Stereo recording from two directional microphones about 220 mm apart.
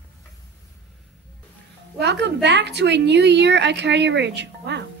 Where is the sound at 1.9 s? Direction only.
50° right (ahead or behind).